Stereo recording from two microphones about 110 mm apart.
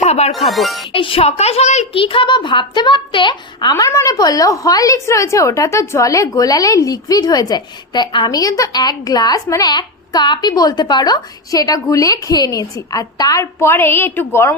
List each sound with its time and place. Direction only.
0.0 s speech: 80° left
0.3 s speech: centre (ahead or behind)
0.9 s speech: 50° left (ahead or behind)
1.2 s a child's voice: 70° left (ahead or behind); by 2.0 s 90° left
2.0 s a woman's voice: 50° left (ahead or behind); by 14.5 s 20° left (ahead or behind)